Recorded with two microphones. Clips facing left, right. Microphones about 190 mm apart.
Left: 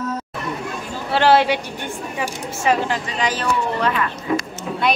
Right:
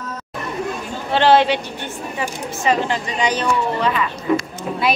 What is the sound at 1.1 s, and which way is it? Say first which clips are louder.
Speech: right 1 dB; 10° left (ahead or behind).